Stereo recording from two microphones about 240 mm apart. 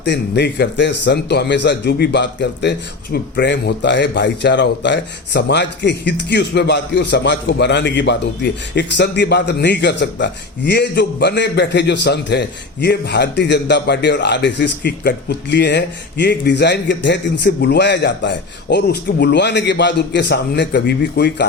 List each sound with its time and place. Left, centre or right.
0.0 s speech: left